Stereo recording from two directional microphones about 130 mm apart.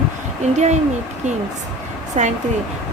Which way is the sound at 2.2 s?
60° right (ahead or behind).